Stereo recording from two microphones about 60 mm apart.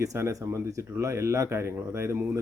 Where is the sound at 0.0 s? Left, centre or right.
Right.